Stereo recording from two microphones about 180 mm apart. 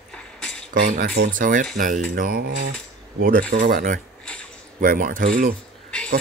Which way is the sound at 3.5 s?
50° right (ahead or behind).